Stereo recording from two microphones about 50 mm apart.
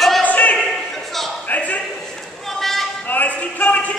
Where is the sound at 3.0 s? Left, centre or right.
Left.